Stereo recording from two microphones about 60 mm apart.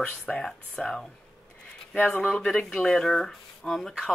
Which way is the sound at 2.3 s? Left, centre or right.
Centre.